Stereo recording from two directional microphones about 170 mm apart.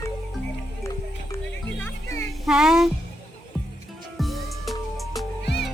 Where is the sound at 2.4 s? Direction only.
5° right (ahead or behind).